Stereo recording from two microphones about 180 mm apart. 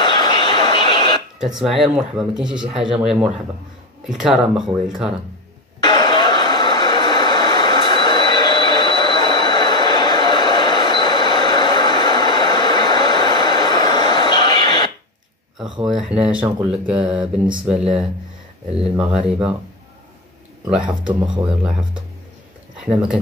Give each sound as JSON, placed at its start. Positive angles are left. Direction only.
{"t": 0.0, "sound": "radio", "side_deg": 25}
{"t": 1.6, "sound": "speech", "side_deg": 0}
{"t": 5.9, "sound": "a sound", "side_deg": 25}
{"t": 15.8, "sound": "speech", "side_deg": -5}
{"t": 16.7, "sound": "mantra", "side_deg": -5}
{"t": 17.6, "sound": "speech", "side_deg": -5}
{"t": 21.5, "sound": "speech", "side_deg": -5}
{"t": 22.8, "sound": "speech", "side_deg": -5}